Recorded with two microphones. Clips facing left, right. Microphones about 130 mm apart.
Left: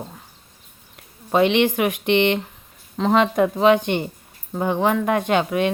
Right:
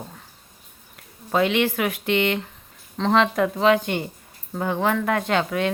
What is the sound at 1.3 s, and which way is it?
Speech, 20° left (ahead or behind).